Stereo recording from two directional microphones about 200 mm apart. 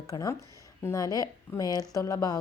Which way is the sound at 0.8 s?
15° left (ahead or behind).